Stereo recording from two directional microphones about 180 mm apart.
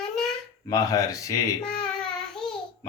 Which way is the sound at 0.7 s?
20° left (ahead or behind).